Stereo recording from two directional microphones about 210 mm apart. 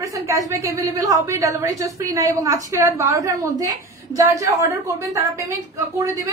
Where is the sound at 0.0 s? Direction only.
15° right (ahead or behind).